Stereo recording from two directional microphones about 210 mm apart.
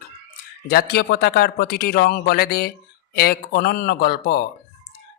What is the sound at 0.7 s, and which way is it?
A man's voice, 50° left (ahead or behind).